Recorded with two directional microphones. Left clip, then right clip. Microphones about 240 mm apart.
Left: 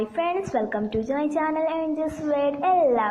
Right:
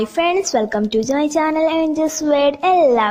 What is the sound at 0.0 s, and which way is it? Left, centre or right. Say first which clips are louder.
A woman's voice: right 8 dB; right.